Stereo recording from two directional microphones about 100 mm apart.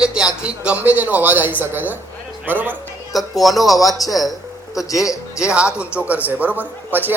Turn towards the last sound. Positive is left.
turn(degrees=-20)  # may be behind; listen again after turning